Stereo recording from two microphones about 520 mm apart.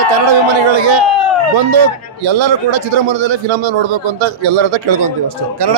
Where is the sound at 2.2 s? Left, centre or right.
Right.